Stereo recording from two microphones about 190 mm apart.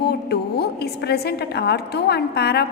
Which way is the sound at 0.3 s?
60° left (ahead or behind).